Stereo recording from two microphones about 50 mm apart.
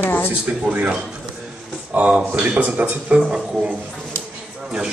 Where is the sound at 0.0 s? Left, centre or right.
Left.